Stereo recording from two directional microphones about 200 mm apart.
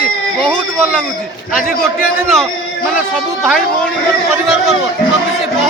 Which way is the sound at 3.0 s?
5° right (ahead or behind).